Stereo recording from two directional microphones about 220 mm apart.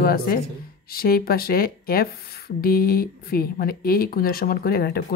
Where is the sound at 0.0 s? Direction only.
40° left (ahead or behind).